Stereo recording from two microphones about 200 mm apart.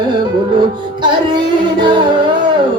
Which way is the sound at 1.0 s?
25° right (ahead or behind).